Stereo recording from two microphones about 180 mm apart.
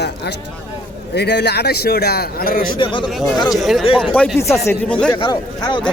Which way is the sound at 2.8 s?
25° left (ahead or behind).